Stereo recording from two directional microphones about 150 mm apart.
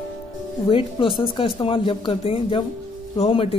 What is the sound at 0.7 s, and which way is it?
Speech, 35° left (ahead or behind).